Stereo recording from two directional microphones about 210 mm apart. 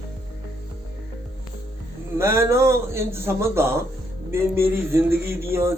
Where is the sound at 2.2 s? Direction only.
10° right (ahead or behind).